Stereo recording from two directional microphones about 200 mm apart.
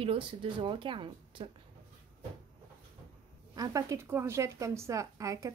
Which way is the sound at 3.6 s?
15° right (ahead or behind).